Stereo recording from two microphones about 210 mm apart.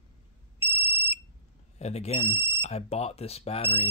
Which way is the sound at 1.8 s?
30° left (ahead or behind).